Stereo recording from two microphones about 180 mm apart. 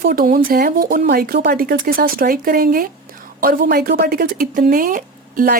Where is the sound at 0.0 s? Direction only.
55° right (ahead or behind).